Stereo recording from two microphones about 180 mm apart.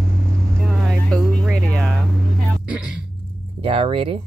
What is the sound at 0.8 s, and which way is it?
Music, 5° left (ahead or behind).